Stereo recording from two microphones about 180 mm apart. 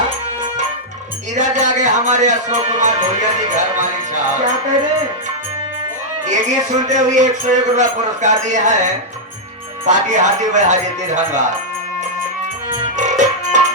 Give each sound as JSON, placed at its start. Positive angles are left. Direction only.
{"t": 1.4, "sound": "speech", "side_deg": -40}
{"t": 6.2, "sound": "speech", "side_deg": -40}
{"t": 13.0, "sound": "music", "side_deg": -40}